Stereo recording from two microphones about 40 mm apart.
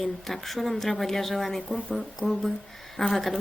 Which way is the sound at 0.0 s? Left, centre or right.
Centre.